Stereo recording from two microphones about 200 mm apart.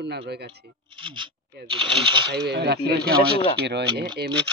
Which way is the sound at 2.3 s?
55° right (ahead or behind).